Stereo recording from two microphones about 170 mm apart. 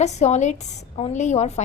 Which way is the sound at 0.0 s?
40° left (ahead or behind).